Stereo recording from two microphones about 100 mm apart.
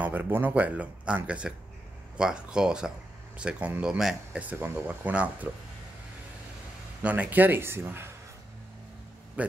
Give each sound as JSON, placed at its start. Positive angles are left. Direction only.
{"t": 0.0, "sound": "speech", "side_deg": -15}
{"t": 7.0, "sound": "a man's voice", "side_deg": -15}
{"t": 9.4, "sound": "speech", "side_deg": -15}